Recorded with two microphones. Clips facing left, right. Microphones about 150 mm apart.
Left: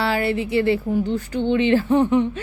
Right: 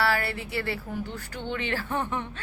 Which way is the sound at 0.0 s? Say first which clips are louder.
Left 6 dB; 20° left (ahead or behind).